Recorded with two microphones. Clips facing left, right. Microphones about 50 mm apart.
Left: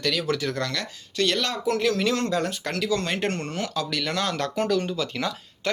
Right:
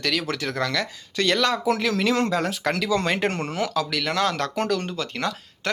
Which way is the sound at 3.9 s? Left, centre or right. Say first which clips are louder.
Right 3 dB; right.